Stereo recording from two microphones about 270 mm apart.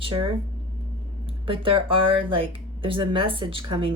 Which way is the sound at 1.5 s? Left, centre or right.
Centre.